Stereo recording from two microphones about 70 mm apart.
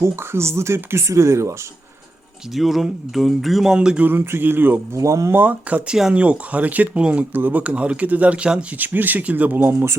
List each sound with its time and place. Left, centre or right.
0.0 s speech: right
2.5 s speech: centre
4.0 s speech: right
4.9 s speech: right
5.3 s speech: right
8.8 s speech: right